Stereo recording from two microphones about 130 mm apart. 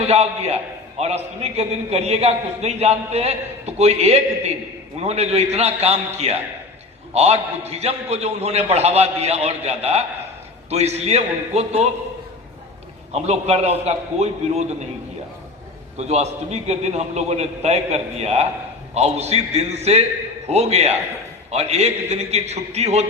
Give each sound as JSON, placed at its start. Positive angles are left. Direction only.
{"t": 0.0, "sound": "a man's voice", "side_deg": -55}
{"t": 13.1, "sound": "a man's voice", "side_deg": -55}
{"t": 16.0, "sound": "a man's voice", "side_deg": -60}